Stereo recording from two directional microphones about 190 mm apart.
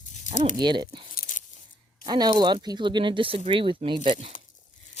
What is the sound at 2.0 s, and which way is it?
Speech, 20° right (ahead or behind).